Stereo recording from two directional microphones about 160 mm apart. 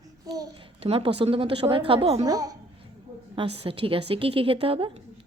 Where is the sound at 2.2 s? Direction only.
20° right (ahead or behind).